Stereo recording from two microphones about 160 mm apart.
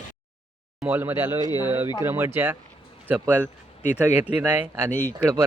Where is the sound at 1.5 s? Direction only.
25° left (ahead or behind).